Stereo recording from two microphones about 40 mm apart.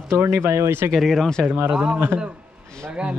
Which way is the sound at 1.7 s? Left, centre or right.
Right.